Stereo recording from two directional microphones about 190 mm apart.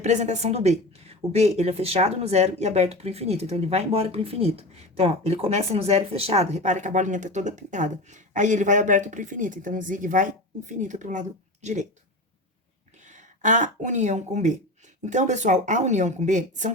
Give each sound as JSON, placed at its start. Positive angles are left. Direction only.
{"t": 0.0, "sound": "a woman's voice", "side_deg": -35}
{"t": 13.1, "sound": "a woman's voice", "side_deg": -40}